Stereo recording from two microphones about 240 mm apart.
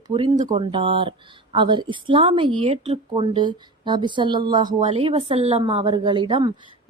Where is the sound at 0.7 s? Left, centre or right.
Right.